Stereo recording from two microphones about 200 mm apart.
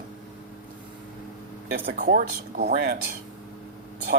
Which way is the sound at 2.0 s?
45° right (ahead or behind).